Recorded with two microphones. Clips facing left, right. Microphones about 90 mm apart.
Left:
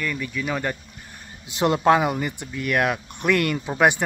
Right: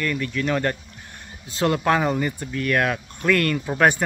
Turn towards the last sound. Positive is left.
turn(degrees=20)  # may be behind; listen again after turning